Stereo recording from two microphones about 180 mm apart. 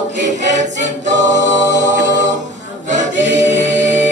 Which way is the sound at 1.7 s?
80° right.